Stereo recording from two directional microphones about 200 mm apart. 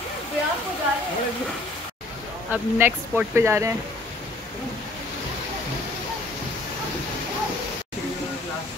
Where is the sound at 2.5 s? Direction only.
10° right (ahead or behind).